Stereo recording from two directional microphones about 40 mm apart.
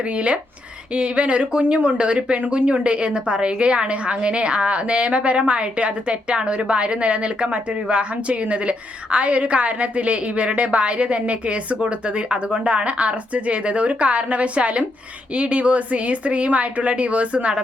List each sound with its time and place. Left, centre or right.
0.0 s a woman's voice: right